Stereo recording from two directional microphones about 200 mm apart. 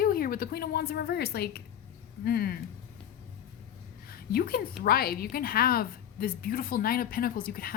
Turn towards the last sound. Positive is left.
turn(degrees=45)  # may be behind; listen again after turning